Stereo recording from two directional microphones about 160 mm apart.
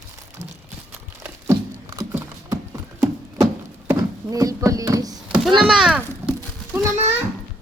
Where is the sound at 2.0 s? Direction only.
15° right (ahead or behind).